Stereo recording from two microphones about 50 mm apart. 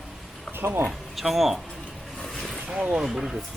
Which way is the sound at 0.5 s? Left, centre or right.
Right.